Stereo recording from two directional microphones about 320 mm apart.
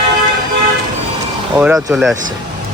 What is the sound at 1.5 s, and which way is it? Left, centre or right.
Speech, centre.